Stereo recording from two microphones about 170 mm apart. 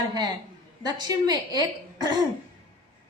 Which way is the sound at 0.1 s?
25° right (ahead or behind).